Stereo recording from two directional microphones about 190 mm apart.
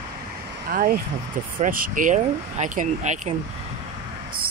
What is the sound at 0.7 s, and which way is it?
Speech, 50° right (ahead or behind).